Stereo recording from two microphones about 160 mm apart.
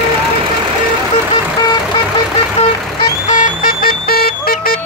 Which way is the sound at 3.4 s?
65° left (ahead or behind).